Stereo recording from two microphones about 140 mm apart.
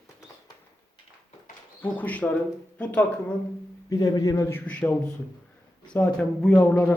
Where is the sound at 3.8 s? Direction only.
25° left (ahead or behind).